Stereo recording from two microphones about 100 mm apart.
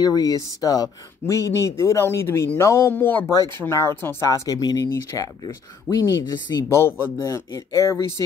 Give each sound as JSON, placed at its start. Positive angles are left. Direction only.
{"t": 0.0, "sound": "speech", "side_deg": 40}